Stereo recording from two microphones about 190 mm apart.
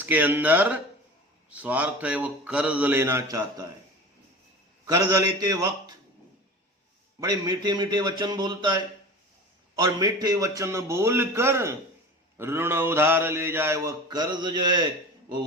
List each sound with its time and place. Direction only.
0.0 s mantra: 10° right (ahead or behind)
4.9 s mantra: 15° right (ahead or behind)
7.2 s a man's voice: 20° right (ahead or behind)
9.7 s mantra: 20° right (ahead or behind)